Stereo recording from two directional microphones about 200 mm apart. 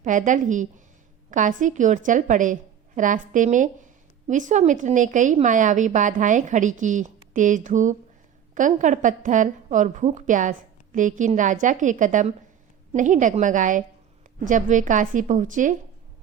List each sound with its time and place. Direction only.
0.0 s a woman's voice: 40° right (ahead or behind)